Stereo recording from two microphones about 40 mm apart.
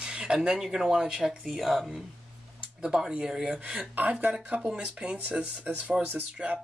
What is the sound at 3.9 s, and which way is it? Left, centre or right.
Speech, right.